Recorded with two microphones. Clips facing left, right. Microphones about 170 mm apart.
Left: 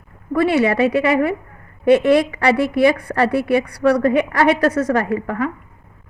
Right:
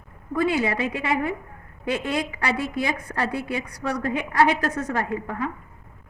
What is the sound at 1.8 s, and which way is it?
A woman's voice, 70° left (ahead or behind).